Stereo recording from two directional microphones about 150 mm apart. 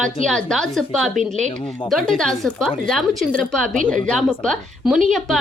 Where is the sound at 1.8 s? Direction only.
Centre (ahead or behind).